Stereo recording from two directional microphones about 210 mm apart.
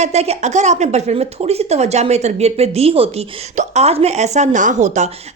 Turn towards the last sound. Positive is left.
turn(degrees=-35)  # may be behind; listen again after turning